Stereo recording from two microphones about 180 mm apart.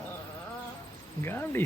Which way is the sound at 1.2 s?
15° left (ahead or behind).